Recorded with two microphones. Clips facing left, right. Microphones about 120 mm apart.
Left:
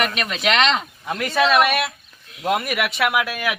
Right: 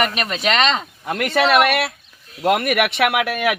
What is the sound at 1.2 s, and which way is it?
Speech, 65° right (ahead or behind).